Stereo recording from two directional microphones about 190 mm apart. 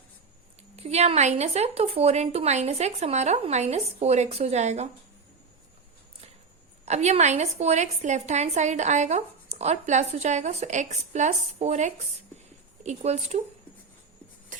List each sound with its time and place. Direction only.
0.8 s a woman's voice: 35° right (ahead or behind)
6.8 s a woman's voice: 35° right (ahead or behind)
14.5 s rub: 45° right (ahead or behind)